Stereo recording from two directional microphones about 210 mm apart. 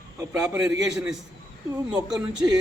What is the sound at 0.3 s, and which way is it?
Speech, 15° right (ahead or behind).